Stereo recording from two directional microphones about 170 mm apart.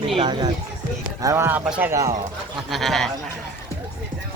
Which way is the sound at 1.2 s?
15° right (ahead or behind).